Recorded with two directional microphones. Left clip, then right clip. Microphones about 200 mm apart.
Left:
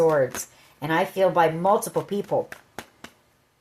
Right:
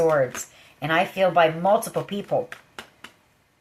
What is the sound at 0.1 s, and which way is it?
Speech, 40° left (ahead or behind).